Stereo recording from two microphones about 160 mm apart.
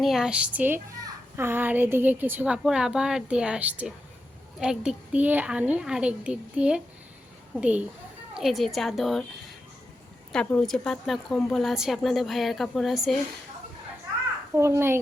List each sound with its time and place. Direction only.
0.0 s a child's voice: centre (ahead or behind)
10.3 s a woman's voice: 5° left (ahead or behind)
14.5 s a child's voice: 15° right (ahead or behind)